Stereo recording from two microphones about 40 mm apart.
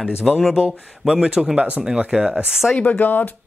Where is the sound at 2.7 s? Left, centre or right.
Left.